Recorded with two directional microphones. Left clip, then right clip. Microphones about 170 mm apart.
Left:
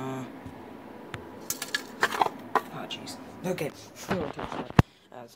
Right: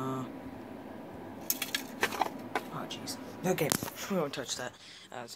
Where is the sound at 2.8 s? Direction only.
5° right (ahead or behind).